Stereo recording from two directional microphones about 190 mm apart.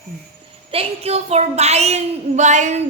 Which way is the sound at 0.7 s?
30° right (ahead or behind).